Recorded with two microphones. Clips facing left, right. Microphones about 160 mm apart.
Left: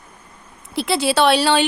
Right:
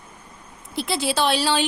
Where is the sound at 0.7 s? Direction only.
75° left (ahead or behind).